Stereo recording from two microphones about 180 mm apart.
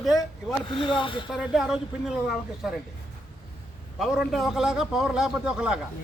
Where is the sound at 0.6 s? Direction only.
30° left (ahead or behind).